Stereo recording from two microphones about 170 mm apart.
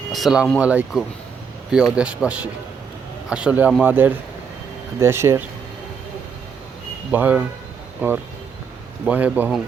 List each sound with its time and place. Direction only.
0.1 s speech: centre (ahead or behind)
7.1 s speech: 10° right (ahead or behind)